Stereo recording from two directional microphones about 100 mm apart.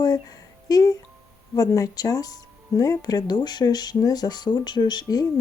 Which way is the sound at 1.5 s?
35° left (ahead or behind).